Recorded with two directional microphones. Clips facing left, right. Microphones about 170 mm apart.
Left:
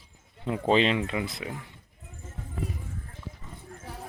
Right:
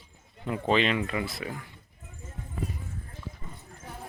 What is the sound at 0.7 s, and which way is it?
Speech, 30° left (ahead or behind).